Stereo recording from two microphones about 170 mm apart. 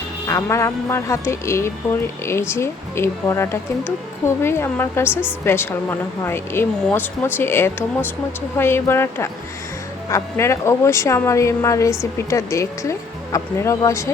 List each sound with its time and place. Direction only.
0.3 s speech: 15° left (ahead or behind)